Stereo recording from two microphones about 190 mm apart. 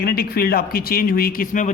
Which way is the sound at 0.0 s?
55° left (ahead or behind).